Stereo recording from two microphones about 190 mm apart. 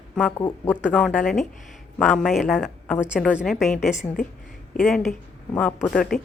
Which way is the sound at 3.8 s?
40° left (ahead or behind).